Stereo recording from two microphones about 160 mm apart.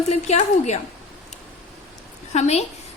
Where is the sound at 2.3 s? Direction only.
45° left (ahead or behind).